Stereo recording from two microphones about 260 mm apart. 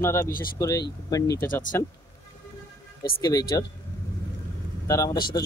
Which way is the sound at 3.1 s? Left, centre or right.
Centre.